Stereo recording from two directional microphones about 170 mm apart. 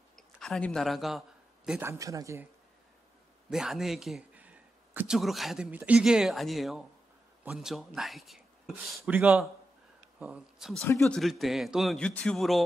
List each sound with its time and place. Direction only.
0.1 s speech: 5° left (ahead or behind)
1.7 s speech: 15° right (ahead or behind)
3.4 s speech: 5° right (ahead or behind)